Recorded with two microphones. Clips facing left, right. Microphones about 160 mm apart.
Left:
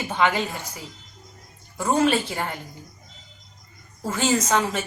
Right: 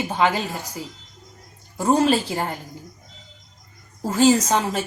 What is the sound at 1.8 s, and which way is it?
Speech, 35° right (ahead or behind).